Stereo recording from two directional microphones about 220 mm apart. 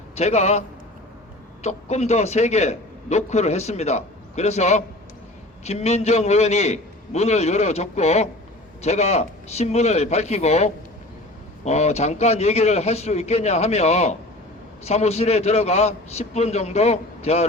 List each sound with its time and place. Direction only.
0.2 s a man's voice: 30° left (ahead or behind)
1.6 s a man's voice: 30° left (ahead or behind)